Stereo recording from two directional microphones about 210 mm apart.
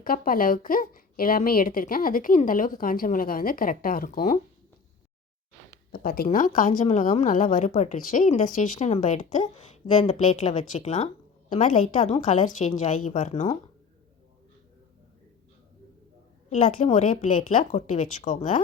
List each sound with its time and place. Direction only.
0.0 s a woman's voice: 45° left (ahead or behind)
5.9 s a woman's voice: 45° left (ahead or behind)
16.5 s a woman's voice: 35° left (ahead or behind)